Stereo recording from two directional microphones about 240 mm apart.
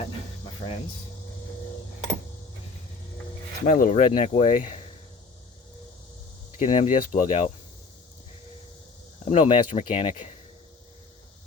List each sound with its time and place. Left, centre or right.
3.7 s speech: left
6.6 s speech: left
9.2 s speech: left